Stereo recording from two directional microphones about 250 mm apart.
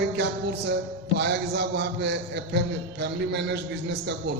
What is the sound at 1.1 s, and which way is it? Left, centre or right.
A man's voice, right.